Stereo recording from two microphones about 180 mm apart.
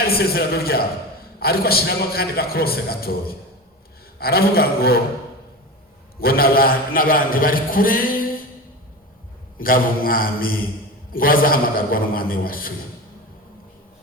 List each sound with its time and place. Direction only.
0.0 s a man's voice: 60° left (ahead or behind)
6.1 s a man's voice: 55° left (ahead or behind)
9.6 s a man's voice: 50° left (ahead or behind)